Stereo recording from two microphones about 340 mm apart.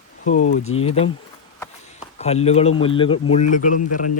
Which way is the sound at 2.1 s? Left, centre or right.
Centre.